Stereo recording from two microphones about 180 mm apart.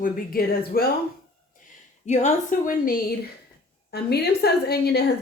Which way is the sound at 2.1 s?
40° left (ahead or behind).